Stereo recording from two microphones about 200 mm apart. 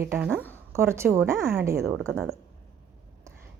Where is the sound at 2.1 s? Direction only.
Centre (ahead or behind).